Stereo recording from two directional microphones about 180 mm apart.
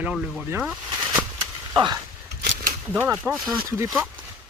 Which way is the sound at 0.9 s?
20° right (ahead or behind).